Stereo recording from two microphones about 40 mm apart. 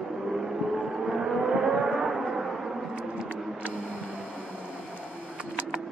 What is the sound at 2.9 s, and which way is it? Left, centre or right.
Vehicle, right.